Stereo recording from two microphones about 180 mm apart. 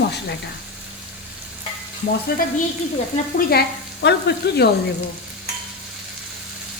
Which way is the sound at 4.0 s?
70° left (ahead or behind).